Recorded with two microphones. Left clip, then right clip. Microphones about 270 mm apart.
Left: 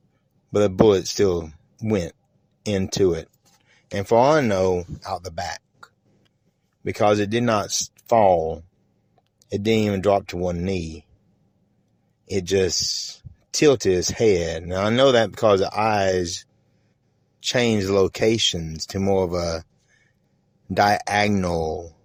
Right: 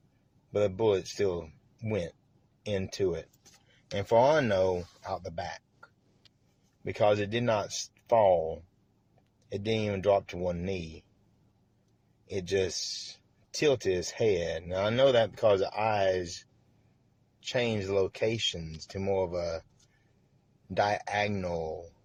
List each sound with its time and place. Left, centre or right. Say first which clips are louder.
0.5 s speech: left 10 dB; left
12.3 s speech: left 9 dB; left
17.4 s speech: left 9 dB; left
20.7 s speech: left 10 dB; left